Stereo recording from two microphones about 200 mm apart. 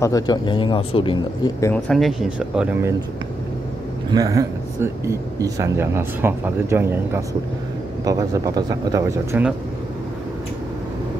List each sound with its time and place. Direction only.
0.0 s speech: 20° left (ahead or behind)
1.6 s speech: 5° left (ahead or behind)
4.1 s speech: 15° right (ahead or behind)